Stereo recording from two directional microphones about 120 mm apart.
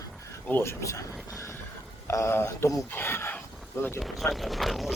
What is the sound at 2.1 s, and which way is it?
Speech, 25° left (ahead or behind).